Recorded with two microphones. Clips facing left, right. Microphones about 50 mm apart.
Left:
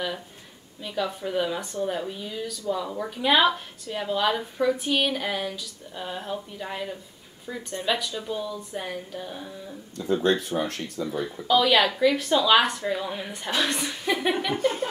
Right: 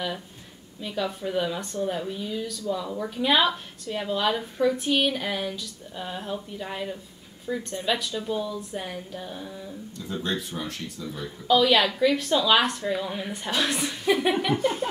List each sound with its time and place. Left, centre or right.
0.8 s speech: centre
10.2 s speech: left
11.4 s speech: centre
14.6 s chuckle: right